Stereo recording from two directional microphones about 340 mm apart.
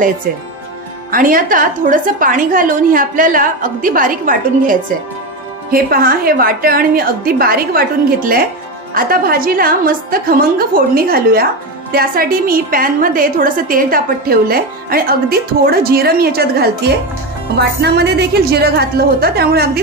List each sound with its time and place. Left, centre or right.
1.1 s a woman's voice: right